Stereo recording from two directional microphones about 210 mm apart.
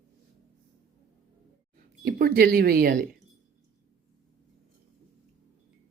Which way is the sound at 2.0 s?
45° right (ahead or behind).